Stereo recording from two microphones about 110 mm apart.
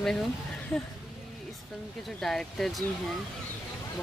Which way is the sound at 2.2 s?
5° left (ahead or behind).